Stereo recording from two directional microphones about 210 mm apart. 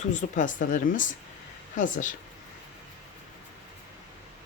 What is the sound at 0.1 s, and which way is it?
Speech, 35° left (ahead or behind).